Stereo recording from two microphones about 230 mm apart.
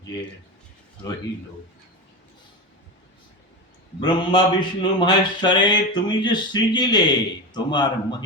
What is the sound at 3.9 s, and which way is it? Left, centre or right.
Speech, centre.